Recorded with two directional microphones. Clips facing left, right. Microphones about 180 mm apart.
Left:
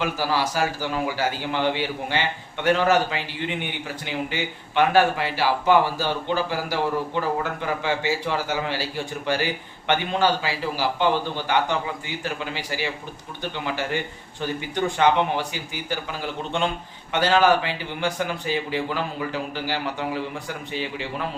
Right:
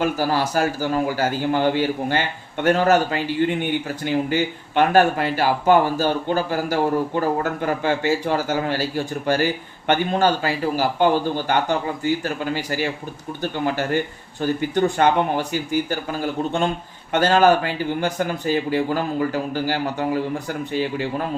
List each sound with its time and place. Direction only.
0.0 s a man's voice: 45° right (ahead or behind)